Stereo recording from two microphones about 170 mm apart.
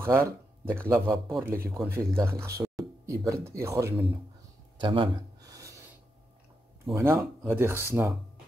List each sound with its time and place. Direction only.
0.0 s speech: 15° right (ahead or behind)
4.7 s a sound: 30° right (ahead or behind)
7.0 s speech: 15° right (ahead or behind)